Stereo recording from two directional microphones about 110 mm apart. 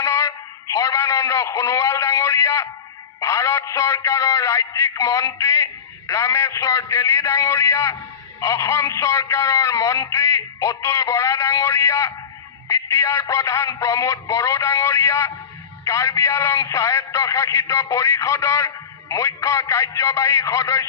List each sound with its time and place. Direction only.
0.0 s a man's voice: 30° left (ahead or behind)